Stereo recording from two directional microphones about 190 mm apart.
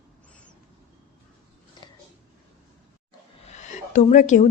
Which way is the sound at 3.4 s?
40° left (ahead or behind).